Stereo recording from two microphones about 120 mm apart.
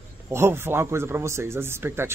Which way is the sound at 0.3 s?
20° right (ahead or behind).